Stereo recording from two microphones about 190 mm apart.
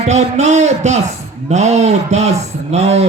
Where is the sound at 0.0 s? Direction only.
35° right (ahead or behind).